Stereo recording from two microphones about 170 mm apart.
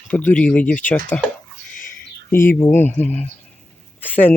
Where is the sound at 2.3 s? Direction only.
15° left (ahead or behind).